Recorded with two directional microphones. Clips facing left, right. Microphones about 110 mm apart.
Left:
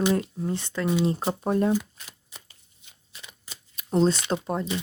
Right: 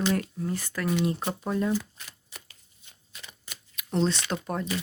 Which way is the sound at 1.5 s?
45° left (ahead or behind).